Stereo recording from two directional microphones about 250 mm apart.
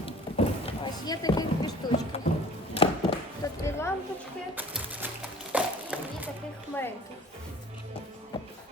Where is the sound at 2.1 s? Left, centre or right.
Left.